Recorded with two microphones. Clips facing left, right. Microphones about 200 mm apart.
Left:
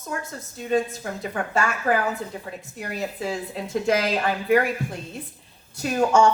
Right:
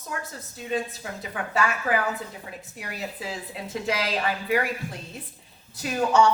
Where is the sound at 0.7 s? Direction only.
45° left (ahead or behind).